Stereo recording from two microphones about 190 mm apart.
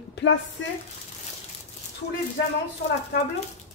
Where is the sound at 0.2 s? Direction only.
60° left (ahead or behind).